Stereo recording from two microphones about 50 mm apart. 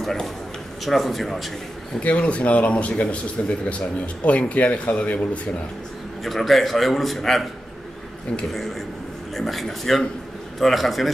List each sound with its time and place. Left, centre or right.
0.0 s a man's voice: centre
2.0 s a man's voice: left
6.2 s a man's voice: centre
9.3 s a man's voice: centre